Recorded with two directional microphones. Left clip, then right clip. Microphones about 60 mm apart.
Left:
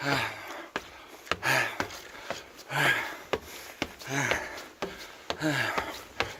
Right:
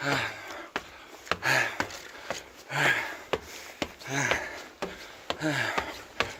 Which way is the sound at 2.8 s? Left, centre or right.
Left.